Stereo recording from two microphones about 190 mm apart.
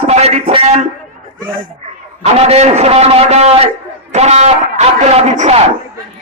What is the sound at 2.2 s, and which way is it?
Speech, 35° right (ahead or behind).